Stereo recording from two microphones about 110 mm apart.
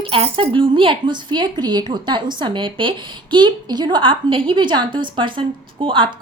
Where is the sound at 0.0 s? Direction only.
55° right (ahead or behind).